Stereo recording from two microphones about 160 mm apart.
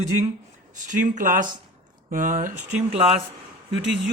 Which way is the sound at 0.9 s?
55° right (ahead or behind).